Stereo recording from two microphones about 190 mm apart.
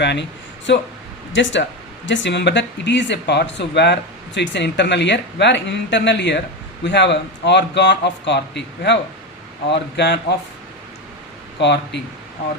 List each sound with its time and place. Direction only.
0.0 s speech: 65° left (ahead or behind)
11.6 s speech: 65° left (ahead or behind)